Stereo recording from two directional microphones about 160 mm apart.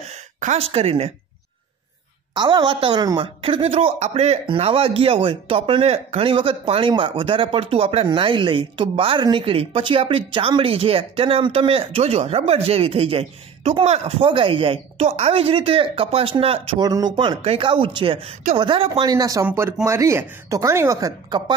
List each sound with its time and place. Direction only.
0.4 s speech: 40° right (ahead or behind)
2.3 s speech: 30° right (ahead or behind)
16.8 s speech: 25° right (ahead or behind)